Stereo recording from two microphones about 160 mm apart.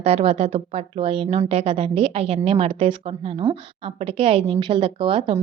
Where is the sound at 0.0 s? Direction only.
40° right (ahead or behind).